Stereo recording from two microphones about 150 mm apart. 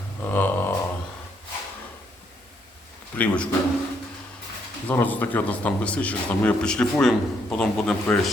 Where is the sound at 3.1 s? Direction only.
10° left (ahead or behind).